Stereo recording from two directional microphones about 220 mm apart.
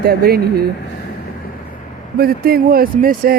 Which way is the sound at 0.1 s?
45° right (ahead or behind).